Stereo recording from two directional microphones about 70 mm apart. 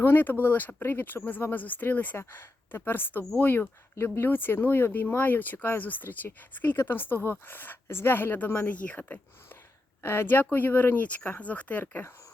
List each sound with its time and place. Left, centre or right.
0.0 s a woman's voice: left
10.0 s a woman's voice: left